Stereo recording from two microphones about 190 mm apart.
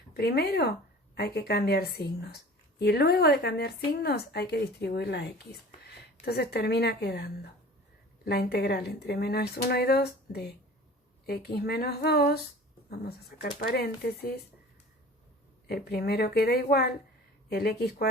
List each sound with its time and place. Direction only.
0.1 s speech: 55° left (ahead or behind)
15.6 s speech: 55° left (ahead or behind)